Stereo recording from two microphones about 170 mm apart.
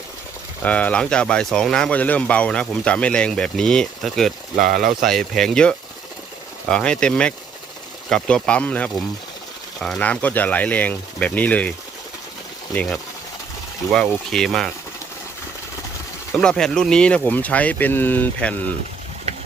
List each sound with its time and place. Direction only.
0.6 s speech: 10° left (ahead or behind)
4.5 s speech: 50° right (ahead or behind)
4.9 s speech: centre (ahead or behind)
12.7 s speech: 5° left (ahead or behind)
16.4 s speech: 5° left (ahead or behind)